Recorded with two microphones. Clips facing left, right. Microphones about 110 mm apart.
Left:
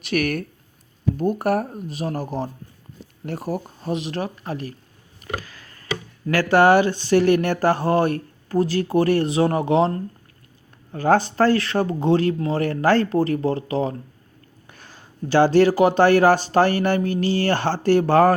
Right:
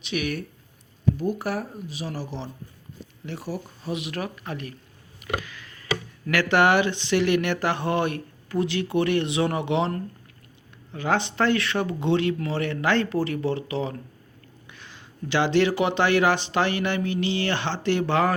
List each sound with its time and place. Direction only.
0.0 s speech: 55° left (ahead or behind)
3.2 s speech: 50° left (ahead or behind)
3.9 s speech: 35° left (ahead or behind)
5.2 s a sound: 35° left (ahead or behind)
6.2 s speech: 35° left (ahead or behind)